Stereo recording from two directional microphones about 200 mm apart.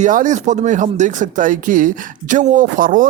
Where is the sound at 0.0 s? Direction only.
40° right (ahead or behind).